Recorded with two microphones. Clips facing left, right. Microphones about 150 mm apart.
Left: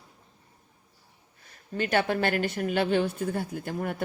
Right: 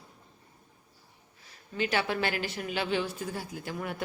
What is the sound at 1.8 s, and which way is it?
A woman's voice, 50° left (ahead or behind).